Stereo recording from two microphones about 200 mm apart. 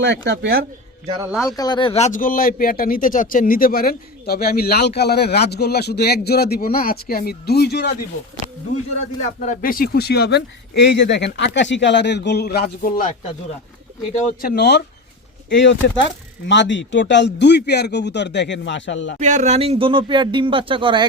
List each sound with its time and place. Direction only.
0.0 s speech: 55° right (ahead or behind)
1.5 s speech: 20° left (ahead or behind); by 7.9 s 55° left (ahead or behind)
9.4 s speech: 40° left (ahead or behind)
14.1 s speech: 50° left (ahead or behind)
19.2 s speech: 35° right (ahead or behind)